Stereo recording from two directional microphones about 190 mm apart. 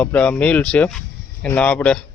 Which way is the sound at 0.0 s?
5° left (ahead or behind).